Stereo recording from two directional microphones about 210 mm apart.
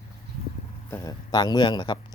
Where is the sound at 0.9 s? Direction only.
15° left (ahead or behind).